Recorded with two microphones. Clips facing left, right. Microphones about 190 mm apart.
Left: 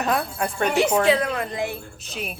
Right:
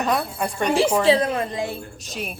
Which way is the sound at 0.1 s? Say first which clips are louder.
Right 1 dB; centre (ahead or behind).